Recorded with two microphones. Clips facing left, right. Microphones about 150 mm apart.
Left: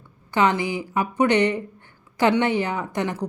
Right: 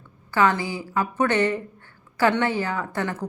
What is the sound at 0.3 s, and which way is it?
A woman's voice, 20° left (ahead or behind).